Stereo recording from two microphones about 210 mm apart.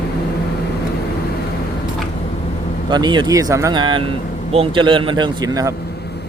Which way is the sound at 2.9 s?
20° right (ahead or behind).